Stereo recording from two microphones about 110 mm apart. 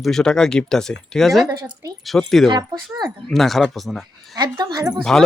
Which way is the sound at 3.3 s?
Centre (ahead or behind).